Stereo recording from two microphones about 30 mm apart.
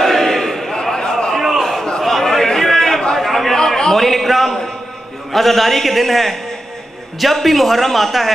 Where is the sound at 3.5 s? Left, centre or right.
Centre.